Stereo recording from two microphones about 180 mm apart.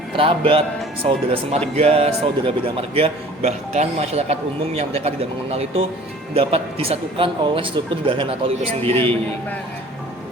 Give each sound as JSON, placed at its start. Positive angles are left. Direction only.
{"t": 0.2, "sound": "a man's voice", "side_deg": -30}